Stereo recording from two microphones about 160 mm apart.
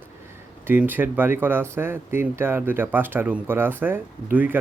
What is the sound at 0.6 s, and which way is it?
Speech, 10° right (ahead or behind).